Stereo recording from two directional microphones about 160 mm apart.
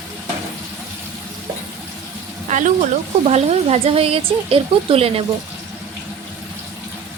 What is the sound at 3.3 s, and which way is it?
Speech, 40° right (ahead or behind).